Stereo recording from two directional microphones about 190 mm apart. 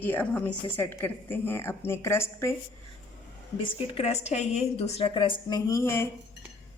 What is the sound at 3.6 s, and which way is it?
A woman's voice, 30° left (ahead or behind).